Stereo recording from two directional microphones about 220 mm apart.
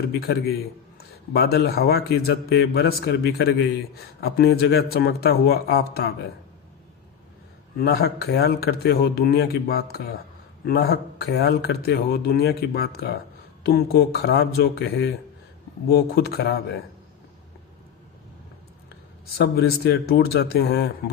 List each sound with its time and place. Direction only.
0.1 s a man's voice: 45° left (ahead or behind)
7.8 s a man's voice: 45° left (ahead or behind)
19.4 s a man's voice: 45° left (ahead or behind)